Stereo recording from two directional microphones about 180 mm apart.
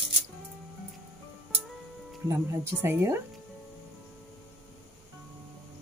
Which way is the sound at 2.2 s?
15° right (ahead or behind).